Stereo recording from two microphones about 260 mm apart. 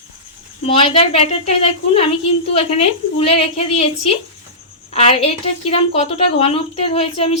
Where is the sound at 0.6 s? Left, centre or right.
Left.